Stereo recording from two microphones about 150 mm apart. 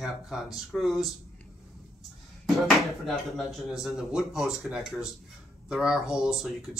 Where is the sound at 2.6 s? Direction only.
Centre (ahead or behind).